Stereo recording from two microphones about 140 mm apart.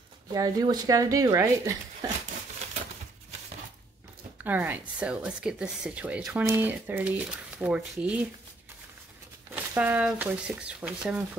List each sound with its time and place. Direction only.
0.3 s speech: 25° right (ahead or behind)
4.5 s speech: 10° right (ahead or behind)
9.5 s speech: 10° right (ahead or behind)